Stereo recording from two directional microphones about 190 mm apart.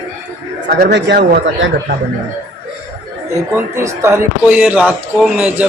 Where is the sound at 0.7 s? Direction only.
60° right (ahead or behind).